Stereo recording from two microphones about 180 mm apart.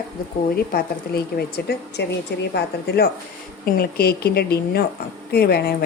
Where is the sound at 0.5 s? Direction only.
60° left (ahead or behind).